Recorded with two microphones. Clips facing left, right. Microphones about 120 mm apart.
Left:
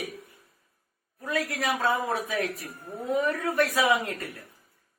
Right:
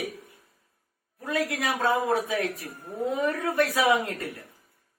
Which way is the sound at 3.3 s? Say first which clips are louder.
Right 1 dB; 15° right (ahead or behind).